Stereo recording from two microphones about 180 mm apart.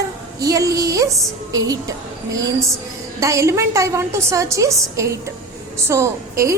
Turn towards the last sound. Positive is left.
turn(degrees=-15)  # may be behind; listen again after turning